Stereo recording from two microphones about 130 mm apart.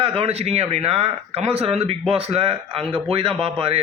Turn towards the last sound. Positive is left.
turn(degrees=-45)  # may be behind; listen again after turning